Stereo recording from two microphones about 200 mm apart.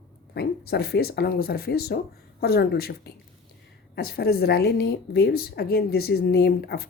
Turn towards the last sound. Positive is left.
turn(degrees=50)  # may be behind; listen again after turning